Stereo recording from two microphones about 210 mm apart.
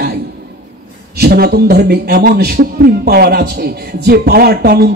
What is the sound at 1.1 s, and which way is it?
A man's voice, 50° right (ahead or behind).